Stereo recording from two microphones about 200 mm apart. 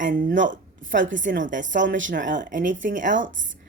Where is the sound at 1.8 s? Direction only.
70° right (ahead or behind).